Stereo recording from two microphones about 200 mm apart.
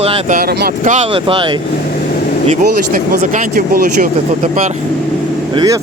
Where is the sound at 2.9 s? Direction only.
40° right (ahead or behind).